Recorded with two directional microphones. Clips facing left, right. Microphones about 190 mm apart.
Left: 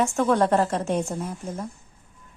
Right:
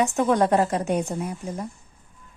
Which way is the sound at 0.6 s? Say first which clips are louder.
Right 1 dB; centre (ahead or behind).